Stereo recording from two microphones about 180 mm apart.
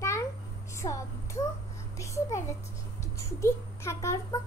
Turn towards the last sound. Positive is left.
turn(degrees=15)  # may be behind; listen again after turning